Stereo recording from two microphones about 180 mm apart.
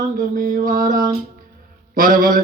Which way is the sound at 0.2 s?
50° right (ahead or behind).